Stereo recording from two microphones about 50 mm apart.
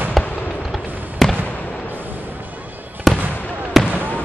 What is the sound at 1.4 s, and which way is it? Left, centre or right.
Basketball bounce, left.